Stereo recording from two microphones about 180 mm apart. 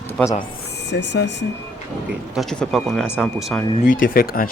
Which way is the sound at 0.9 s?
75° left (ahead or behind).